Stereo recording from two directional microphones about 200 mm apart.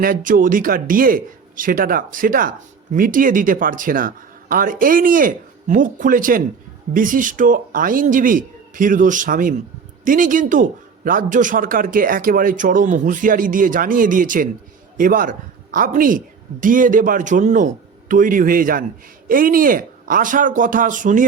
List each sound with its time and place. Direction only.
0.0 s a woman's voice: 45° right (ahead or behind)